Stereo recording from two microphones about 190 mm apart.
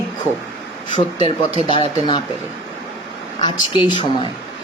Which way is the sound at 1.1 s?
30° right (ahead or behind).